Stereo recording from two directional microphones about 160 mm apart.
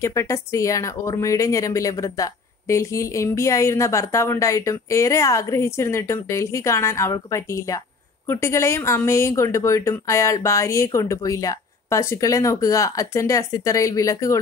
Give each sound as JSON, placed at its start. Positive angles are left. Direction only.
{"t": 0.0, "sound": "speech", "side_deg": 20}